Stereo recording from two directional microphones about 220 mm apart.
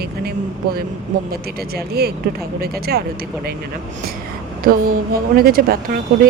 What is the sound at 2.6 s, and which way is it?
Speech, 45° right (ahead or behind).